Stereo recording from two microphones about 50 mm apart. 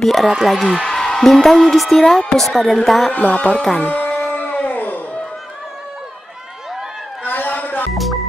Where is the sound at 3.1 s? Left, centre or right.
Left.